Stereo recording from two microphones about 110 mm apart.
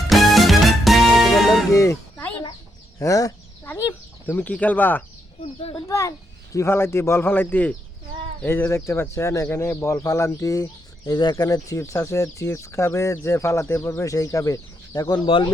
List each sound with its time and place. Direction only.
0.1 s music: centre (ahead or behind)
1.7 s a sound: 30° left (ahead or behind)
3.0 s speech: 30° left (ahead or behind)
4.3 s speech: 15° left (ahead or behind)
5.4 s a child's voice: 65° left (ahead or behind)
5.9 s speech: 30° left (ahead or behind)
15.0 s speech: 45° left (ahead or behind)